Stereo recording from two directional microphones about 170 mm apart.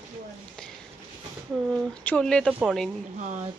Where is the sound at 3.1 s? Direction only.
45° right (ahead or behind).